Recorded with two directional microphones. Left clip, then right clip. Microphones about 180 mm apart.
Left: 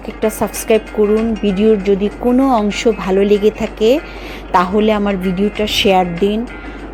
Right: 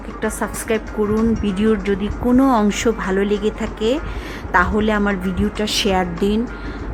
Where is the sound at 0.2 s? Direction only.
15° left (ahead or behind).